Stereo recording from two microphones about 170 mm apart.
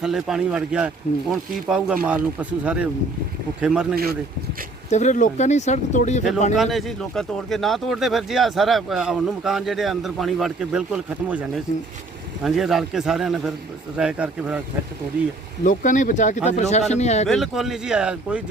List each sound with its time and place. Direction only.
0.0 s speech: 5° right (ahead or behind)
3.9 s speech: 65° right (ahead or behind)
4.9 s speech: 45° left (ahead or behind)
6.6 s speech: centre (ahead or behind)
15.6 s speech: 50° left (ahead or behind)
17.2 s speech: centre (ahead or behind)